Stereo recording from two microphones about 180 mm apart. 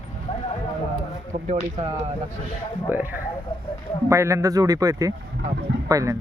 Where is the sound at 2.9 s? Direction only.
10° right (ahead or behind).